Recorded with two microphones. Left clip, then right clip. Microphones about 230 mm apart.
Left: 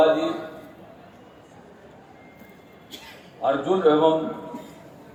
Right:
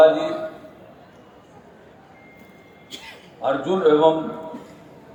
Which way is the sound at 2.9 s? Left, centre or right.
Right.